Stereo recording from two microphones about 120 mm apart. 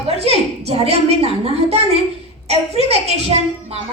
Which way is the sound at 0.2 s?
60° right (ahead or behind).